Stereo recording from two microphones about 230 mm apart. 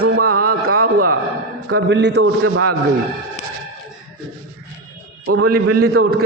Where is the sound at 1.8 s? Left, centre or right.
Right.